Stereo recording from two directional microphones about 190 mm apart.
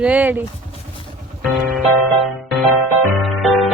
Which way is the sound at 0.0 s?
10° right (ahead or behind).